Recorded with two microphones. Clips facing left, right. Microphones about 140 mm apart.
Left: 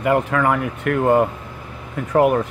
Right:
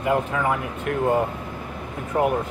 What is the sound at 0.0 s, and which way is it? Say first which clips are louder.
Speech: left 4 dB; 70° left (ahead or behind).